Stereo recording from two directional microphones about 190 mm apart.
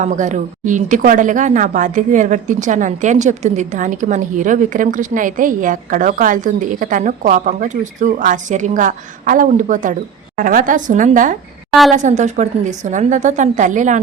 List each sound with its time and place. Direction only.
0.0 s a woman's voice: 40° right (ahead or behind)